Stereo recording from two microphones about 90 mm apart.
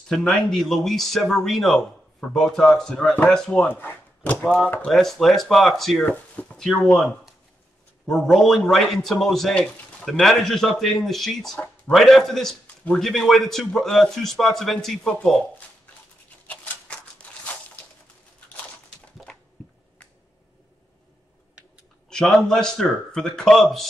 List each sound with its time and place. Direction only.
0.1 s a man's voice: 5° left (ahead or behind)
3.6 s speech: 20° left (ahead or behind)
4.8 s a man's voice: 5° left (ahead or behind)
6.0 s speech: 15° left (ahead or behind)
6.6 s a man's voice: 5° left (ahead or behind)
8.1 s a man's voice: 5° left (ahead or behind)
16.4 s a sound: 15° left (ahead or behind)
22.1 s a man's voice: 5° left (ahead or behind)